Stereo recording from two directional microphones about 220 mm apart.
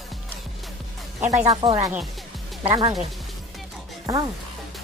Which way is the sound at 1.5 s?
20° right (ahead or behind).